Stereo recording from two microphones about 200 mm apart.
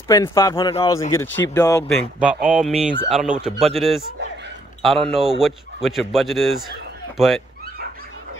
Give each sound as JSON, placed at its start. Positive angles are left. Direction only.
{"t": 0.1, "sound": "speech", "side_deg": 15}
{"t": 2.1, "sound": "speech", "side_deg": -5}